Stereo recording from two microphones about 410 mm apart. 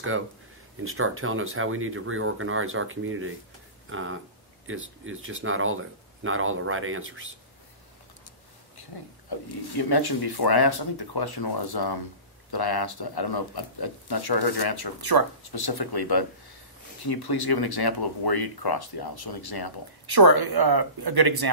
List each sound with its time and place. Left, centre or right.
0.7 s speech: right
9.3 s speech: left
20.1 s speech: right